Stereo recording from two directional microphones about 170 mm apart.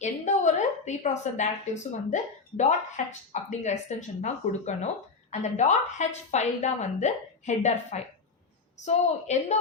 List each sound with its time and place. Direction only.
0.0 s a woman's voice: 45° left (ahead or behind)